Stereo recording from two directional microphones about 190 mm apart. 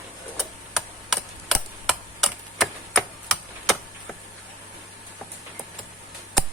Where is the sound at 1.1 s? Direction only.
Centre (ahead or behind).